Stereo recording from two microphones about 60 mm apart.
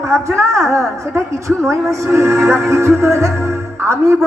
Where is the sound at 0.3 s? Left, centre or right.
Right.